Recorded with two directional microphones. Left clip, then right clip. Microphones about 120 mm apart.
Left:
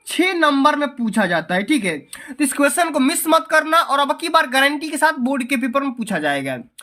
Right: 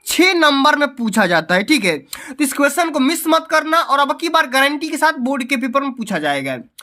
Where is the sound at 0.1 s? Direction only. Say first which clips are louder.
Right 4 dB; 70° right (ahead or behind).